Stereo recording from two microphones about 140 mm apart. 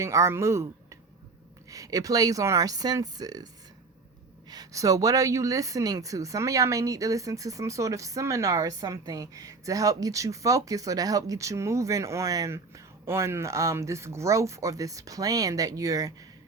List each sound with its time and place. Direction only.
0.0 s a woman's voice: 20° right (ahead or behind)